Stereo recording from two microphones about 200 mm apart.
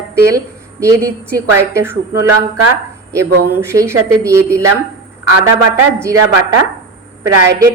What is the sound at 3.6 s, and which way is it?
A woman's voice, 15° right (ahead or behind).